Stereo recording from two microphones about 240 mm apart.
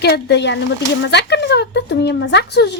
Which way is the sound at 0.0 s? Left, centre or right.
Left.